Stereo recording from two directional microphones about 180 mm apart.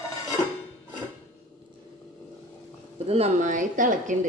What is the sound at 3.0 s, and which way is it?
Speech, 35° right (ahead or behind).